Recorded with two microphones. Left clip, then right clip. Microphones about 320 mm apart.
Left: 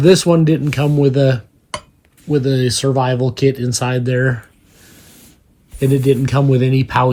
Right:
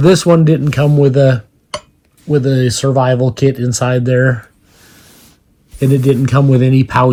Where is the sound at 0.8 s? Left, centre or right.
Right.